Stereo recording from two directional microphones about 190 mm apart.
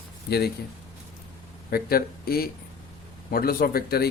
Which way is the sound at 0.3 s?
55° left (ahead or behind).